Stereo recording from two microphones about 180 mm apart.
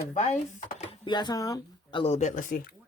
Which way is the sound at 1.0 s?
25° left (ahead or behind).